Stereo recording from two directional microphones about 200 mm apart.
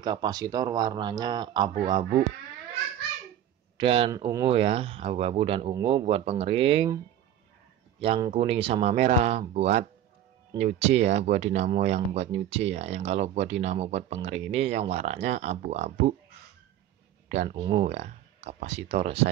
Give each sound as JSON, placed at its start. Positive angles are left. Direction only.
{"t": 0.0, "sound": "speech", "side_deg": -20}
{"t": 3.7, "sound": "speech", "side_deg": -25}
{"t": 4.2, "sound": "speech", "side_deg": -15}
{"t": 4.5, "sound": "speech", "side_deg": -30}
{"t": 8.0, "sound": "speech", "side_deg": -30}
{"t": 17.3, "sound": "speech", "side_deg": -35}
{"t": 17.6, "sound": "speech", "side_deg": -25}
{"t": 17.8, "sound": "speech", "side_deg": -35}